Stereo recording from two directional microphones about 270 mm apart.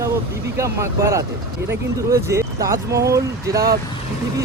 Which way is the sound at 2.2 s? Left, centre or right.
Centre.